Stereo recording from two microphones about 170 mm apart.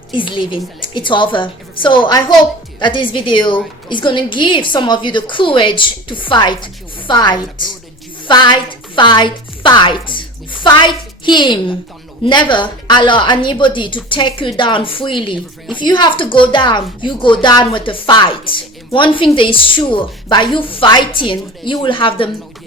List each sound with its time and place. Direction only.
0.2 s a woman's voice: 30° left (ahead or behind)